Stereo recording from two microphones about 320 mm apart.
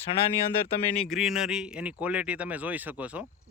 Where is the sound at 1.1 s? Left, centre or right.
Centre.